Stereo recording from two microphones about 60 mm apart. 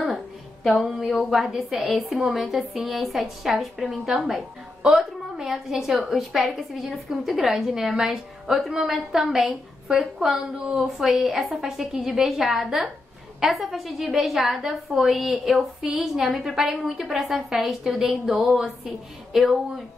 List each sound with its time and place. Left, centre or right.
0.8 s a woman's voice: centre
19.3 s a woman's voice: centre